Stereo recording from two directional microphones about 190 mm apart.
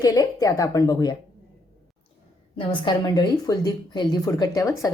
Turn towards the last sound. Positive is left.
turn(degrees=20)  # may be behind; listen again after turning